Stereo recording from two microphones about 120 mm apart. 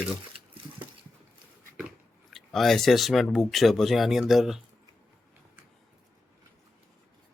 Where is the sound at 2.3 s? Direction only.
Centre (ahead or behind).